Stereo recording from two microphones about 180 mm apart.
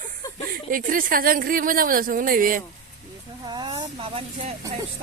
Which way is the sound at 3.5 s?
25° right (ahead or behind).